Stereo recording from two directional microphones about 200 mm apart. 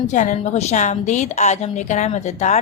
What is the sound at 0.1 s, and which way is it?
Speech, 40° left (ahead or behind).